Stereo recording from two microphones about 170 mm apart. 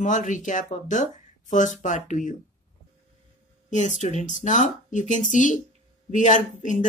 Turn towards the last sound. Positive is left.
turn(degrees=45)  # may be behind; listen again after turning